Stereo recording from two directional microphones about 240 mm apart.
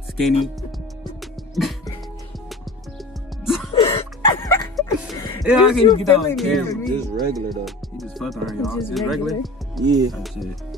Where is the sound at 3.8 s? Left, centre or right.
Left.